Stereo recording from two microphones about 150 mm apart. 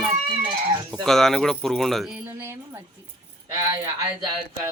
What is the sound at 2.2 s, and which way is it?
Speech, 15° right (ahead or behind).